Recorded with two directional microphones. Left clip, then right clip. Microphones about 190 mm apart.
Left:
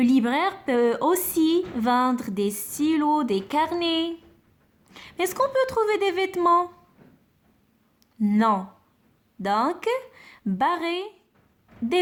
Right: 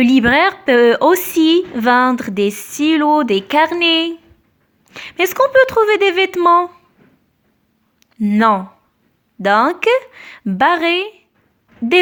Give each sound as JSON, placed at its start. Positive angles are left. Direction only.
{"t": 0.0, "sound": "a woman's voice", "side_deg": -25}
{"t": 8.2, "sound": "a woman's voice", "side_deg": -20}